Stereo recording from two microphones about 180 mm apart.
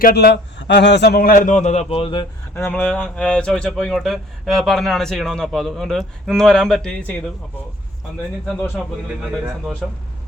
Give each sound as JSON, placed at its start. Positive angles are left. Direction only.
{"t": 0.0, "sound": "a man's voice", "side_deg": 60}
{"t": 2.6, "sound": "speech", "side_deg": 10}
{"t": 8.4, "sound": "speech", "side_deg": 5}